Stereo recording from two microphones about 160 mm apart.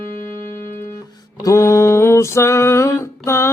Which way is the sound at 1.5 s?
20° left (ahead or behind).